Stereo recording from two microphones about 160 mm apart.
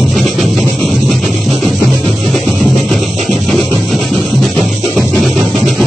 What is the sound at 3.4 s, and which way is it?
Music, centre (ahead or behind).